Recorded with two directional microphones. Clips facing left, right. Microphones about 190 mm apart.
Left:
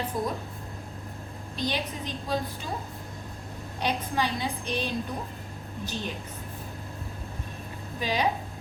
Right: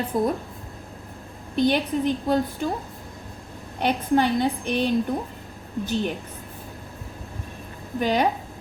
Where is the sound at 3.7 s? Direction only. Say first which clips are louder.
Right 8 dB; 55° right (ahead or behind).